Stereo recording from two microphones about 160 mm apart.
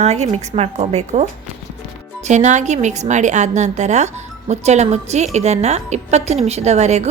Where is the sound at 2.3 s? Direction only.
45° right (ahead or behind).